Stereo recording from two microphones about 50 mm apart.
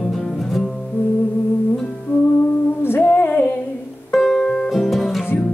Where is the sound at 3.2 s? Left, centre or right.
Left.